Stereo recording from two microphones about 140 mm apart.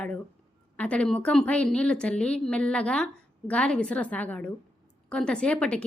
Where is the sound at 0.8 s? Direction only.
10° left (ahead or behind).